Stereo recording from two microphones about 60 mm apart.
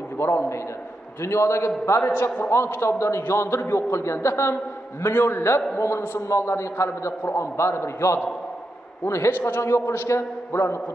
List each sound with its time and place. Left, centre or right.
0.2 s a man's voice: left
2.1 s a man's voice: left
9.3 s a man's voice: left
9.6 s a man's voice: left